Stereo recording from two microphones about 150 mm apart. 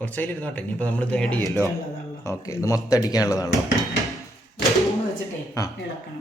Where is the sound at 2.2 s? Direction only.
20° left (ahead or behind).